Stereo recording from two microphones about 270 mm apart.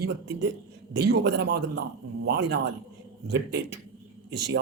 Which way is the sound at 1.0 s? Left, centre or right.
Right.